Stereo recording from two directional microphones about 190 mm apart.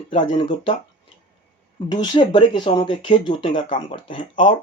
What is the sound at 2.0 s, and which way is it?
Speech, 20° left (ahead or behind).